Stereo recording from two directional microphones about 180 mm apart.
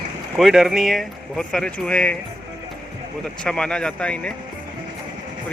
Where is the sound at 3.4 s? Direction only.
5° left (ahead or behind).